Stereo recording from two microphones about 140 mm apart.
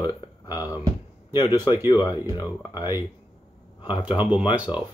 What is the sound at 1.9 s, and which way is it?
Speech, 30° left (ahead or behind).